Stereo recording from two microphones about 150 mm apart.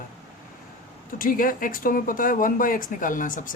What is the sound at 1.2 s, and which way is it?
Speech, 65° left (ahead or behind).